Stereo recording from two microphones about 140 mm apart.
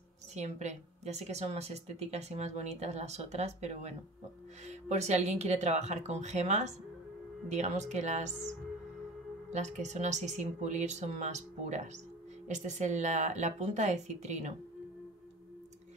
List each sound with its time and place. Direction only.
0.3 s speech: 55° right (ahead or behind)
9.5 s speech: 55° right (ahead or behind)